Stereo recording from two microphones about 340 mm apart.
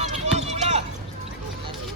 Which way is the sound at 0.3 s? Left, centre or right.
Centre.